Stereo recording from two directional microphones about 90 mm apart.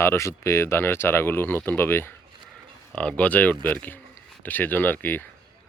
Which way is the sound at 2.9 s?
15° left (ahead or behind).